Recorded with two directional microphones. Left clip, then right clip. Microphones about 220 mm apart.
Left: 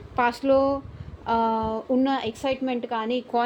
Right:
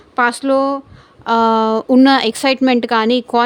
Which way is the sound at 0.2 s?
30° right (ahead or behind).